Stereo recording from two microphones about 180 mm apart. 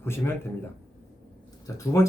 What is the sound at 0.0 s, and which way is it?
Speech, 10° left (ahead or behind).